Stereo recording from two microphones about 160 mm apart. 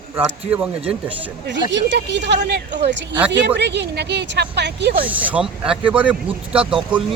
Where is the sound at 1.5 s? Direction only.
90° right.